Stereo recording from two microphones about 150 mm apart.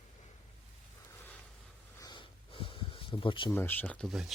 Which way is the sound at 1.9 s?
30° left (ahead or behind).